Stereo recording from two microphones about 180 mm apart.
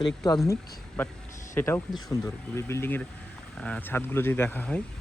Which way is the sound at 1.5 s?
10° left (ahead or behind).